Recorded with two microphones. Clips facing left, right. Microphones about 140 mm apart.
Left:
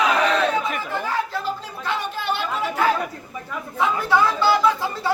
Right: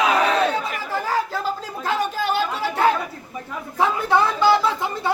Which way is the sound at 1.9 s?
40° right (ahead or behind).